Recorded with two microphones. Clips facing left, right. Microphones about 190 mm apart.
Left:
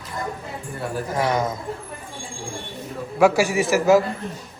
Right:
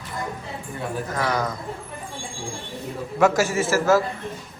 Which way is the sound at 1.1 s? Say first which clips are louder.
Left 3 dB; 25° left (ahead or behind).